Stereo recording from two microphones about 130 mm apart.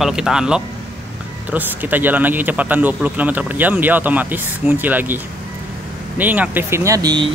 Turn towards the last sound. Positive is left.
turn(degrees=-35)  # may be behind; listen again after turning